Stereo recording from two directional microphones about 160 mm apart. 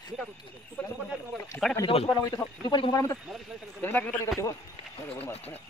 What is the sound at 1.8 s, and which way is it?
A man's voice, 35° left (ahead or behind).